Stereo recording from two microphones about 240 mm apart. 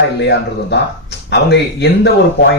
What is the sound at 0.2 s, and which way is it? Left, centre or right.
Speech, left.